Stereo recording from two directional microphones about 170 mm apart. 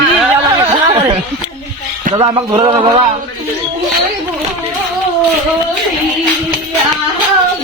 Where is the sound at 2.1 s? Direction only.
25° right (ahead or behind).